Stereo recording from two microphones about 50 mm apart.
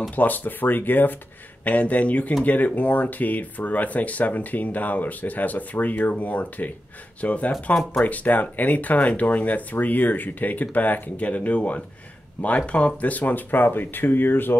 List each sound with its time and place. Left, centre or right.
0.1 s speech: left